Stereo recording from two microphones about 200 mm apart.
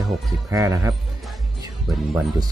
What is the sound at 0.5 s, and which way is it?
Speech, 15° right (ahead or behind).